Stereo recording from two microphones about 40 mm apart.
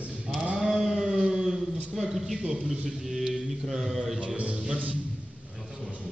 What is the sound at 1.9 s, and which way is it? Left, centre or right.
Speech, centre.